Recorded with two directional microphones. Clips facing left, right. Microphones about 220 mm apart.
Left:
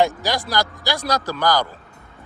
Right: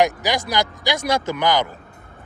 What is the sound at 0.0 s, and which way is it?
Speech, 20° right (ahead or behind).